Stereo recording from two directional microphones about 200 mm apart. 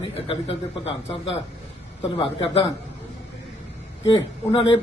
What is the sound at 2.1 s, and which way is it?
Speech, 25° left (ahead or behind).